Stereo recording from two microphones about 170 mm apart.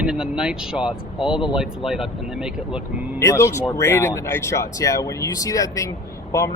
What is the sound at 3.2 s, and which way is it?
A man's voice, 15° left (ahead or behind).